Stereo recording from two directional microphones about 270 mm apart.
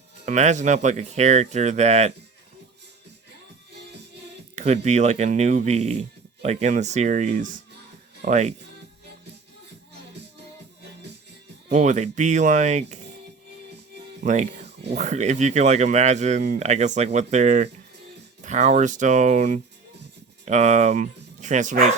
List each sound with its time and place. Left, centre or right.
0.3 s speech: right
4.5 s speech: right
11.7 s speech: right
14.3 s speech: right